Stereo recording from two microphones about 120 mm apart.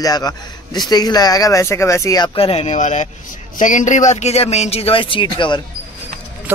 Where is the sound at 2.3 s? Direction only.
55° left (ahead or behind).